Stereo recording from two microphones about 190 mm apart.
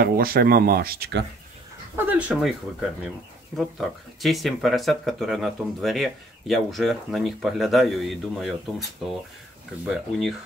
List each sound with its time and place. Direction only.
0.0 s speech: 50° right (ahead or behind)
2.0 s speech: 5° right (ahead or behind)
3.5 s speech: centre (ahead or behind)